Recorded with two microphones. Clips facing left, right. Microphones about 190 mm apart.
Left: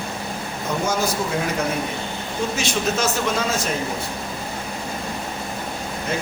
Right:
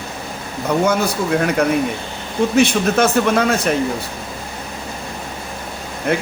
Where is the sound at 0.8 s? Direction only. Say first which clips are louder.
Right 3 dB; 60° right (ahead or behind).